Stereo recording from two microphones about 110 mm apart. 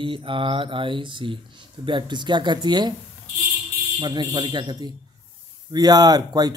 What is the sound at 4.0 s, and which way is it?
Speech, 45° right (ahead or behind).